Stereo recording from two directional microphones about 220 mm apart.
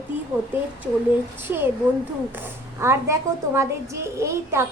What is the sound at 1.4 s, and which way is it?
Speech, 10° right (ahead or behind).